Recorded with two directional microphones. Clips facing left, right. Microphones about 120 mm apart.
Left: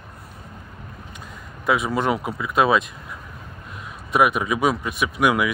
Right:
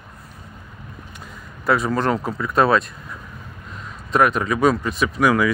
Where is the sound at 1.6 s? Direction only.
5° left (ahead or behind).